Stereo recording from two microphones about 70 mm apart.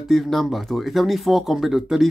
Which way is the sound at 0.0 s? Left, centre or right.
Centre.